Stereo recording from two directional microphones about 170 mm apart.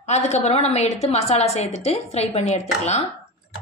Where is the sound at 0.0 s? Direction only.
40° left (ahead or behind).